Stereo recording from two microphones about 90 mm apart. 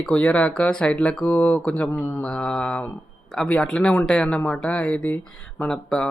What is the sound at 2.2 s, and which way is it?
Speech, 5° left (ahead or behind).